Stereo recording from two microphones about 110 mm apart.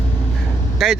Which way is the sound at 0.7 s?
Centre (ahead or behind).